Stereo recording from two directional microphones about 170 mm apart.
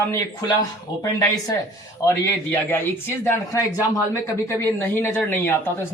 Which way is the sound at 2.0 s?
15° left (ahead or behind).